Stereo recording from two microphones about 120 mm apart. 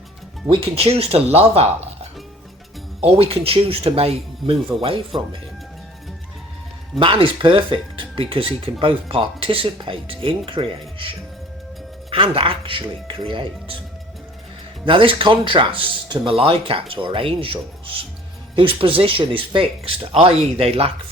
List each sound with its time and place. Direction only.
0.5 s speech: 55° right (ahead or behind)
3.0 s speech: 55° right (ahead or behind)
7.0 s speech: 45° right (ahead or behind)
12.1 s speech: 45° right (ahead or behind)
14.8 s speech: 45° right (ahead or behind)